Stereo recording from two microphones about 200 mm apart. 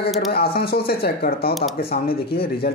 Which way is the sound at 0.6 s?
50° left (ahead or behind).